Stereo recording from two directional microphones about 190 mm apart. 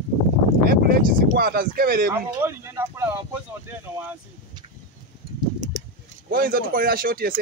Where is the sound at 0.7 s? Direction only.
50° right (ahead or behind).